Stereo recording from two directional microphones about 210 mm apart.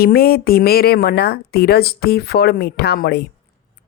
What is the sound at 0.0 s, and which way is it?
A woman's voice, 45° left (ahead or behind).